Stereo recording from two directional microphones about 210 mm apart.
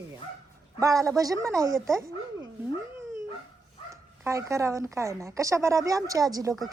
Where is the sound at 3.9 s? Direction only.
15° right (ahead or behind).